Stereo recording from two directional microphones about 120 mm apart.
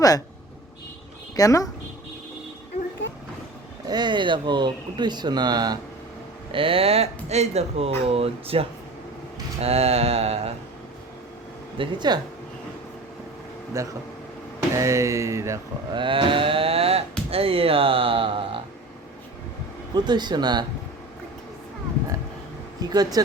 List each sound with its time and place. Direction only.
1.4 s speech: 30° left (ahead or behind)
3.8 s speech: 35° right (ahead or behind)
6.5 s speech: 50° right (ahead or behind)
9.6 s mantra: 55° right (ahead or behind)
11.8 s speech: 35° right (ahead or behind)
13.7 s speech: 25° right (ahead or behind)
15.9 s speech: 45° right (ahead or behind)
19.9 s speech: 35° right (ahead or behind)
22.8 s speech: 35° right (ahead or behind)